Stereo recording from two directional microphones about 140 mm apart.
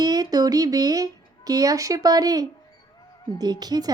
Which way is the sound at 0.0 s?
30° right (ahead or behind).